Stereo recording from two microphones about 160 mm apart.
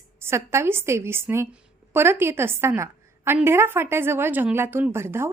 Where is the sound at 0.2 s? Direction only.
15° right (ahead or behind).